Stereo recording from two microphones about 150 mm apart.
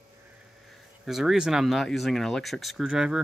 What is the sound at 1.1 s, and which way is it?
Speech, centre (ahead or behind).